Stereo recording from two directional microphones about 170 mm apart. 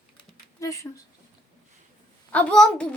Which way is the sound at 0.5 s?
20° left (ahead or behind).